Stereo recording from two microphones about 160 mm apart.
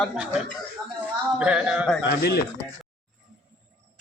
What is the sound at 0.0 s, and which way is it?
A man's voice, centre (ahead or behind).